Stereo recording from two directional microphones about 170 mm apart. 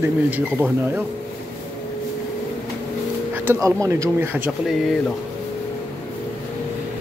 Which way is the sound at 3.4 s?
20° right (ahead or behind).